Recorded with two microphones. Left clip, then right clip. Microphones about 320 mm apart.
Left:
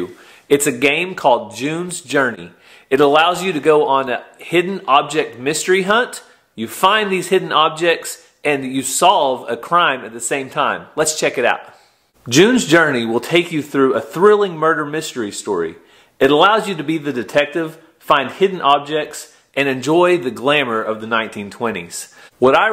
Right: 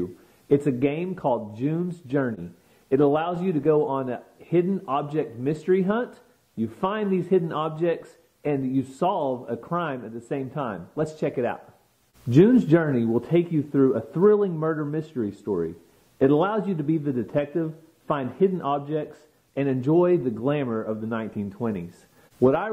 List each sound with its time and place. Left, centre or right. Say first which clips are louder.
0.0 s a man's voice: left 6 dB; centre
9.2 s speech: left 10 dB; left
9.5 s a man's voice: left 14 dB; centre